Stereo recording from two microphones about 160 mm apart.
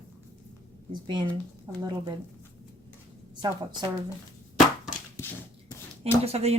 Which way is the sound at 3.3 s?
30° right (ahead or behind).